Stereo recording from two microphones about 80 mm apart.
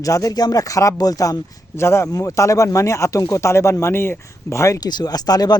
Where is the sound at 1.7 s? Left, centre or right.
Left.